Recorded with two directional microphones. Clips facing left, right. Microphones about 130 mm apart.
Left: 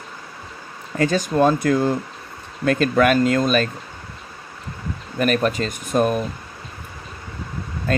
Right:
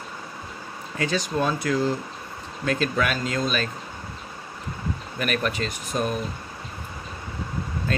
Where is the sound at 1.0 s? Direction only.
45° left (ahead or behind).